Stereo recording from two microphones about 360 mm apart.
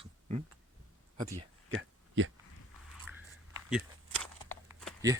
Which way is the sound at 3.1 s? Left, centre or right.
Centre.